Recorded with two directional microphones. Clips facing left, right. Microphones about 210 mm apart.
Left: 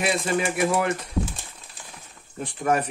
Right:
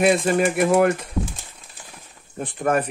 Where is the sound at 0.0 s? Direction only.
50° right (ahead or behind).